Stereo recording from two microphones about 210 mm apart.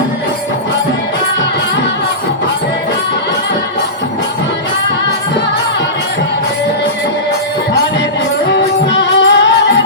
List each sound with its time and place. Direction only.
8.9 s music: 55° left (ahead or behind)